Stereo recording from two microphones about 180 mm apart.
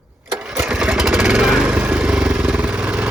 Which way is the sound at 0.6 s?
5° right (ahead or behind).